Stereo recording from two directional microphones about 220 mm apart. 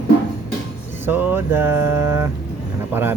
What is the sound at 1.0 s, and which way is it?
Speech, 10° right (ahead or behind).